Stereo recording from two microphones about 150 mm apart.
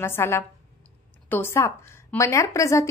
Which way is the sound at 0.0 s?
15° left (ahead or behind).